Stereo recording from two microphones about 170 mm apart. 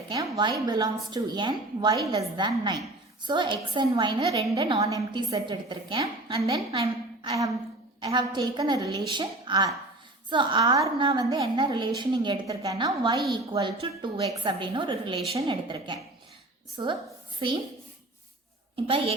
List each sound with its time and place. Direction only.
0.1 s a woman's voice: 25° right (ahead or behind)
18.9 s a woman's voice: 35° right (ahead or behind)